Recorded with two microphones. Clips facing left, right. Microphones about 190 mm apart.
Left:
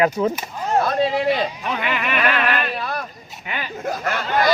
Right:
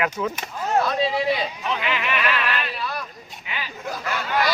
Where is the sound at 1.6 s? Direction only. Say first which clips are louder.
Left 2 dB; 50° left (ahead or behind).